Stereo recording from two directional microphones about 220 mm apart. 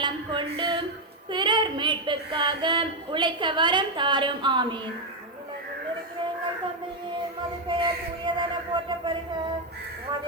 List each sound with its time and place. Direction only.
0.0 s a sound: 20° right (ahead or behind)
1.3 s child singing: 20° right (ahead or behind)
7.7 s child singing: 20° right (ahead or behind)